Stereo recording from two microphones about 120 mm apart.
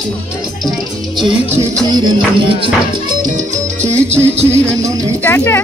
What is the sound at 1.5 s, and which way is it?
Music, 20° right (ahead or behind).